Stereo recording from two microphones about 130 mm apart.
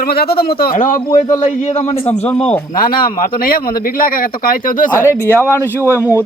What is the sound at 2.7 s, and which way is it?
Speech, 90° left.